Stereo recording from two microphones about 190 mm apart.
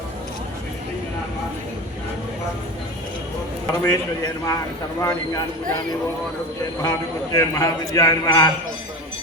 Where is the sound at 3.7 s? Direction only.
20° left (ahead or behind).